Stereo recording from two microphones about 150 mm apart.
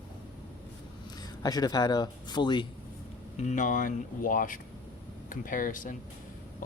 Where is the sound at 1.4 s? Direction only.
25° left (ahead or behind).